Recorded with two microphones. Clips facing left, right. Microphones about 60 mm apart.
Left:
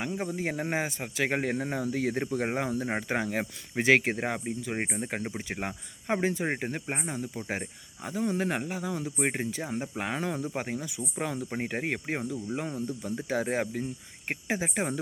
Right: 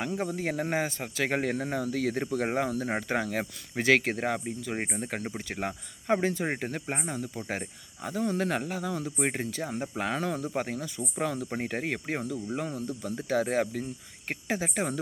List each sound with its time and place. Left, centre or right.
0.0 s speech: centre